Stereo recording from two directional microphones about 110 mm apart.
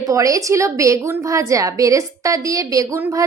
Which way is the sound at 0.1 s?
30° right (ahead or behind).